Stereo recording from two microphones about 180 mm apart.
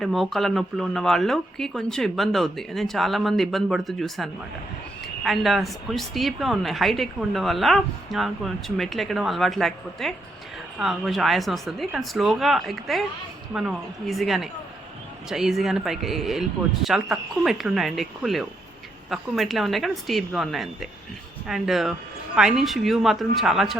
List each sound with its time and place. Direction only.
0.0 s a woman's voice: centre (ahead or behind)